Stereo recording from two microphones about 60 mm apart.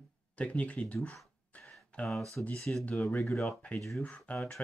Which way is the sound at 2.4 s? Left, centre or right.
Left.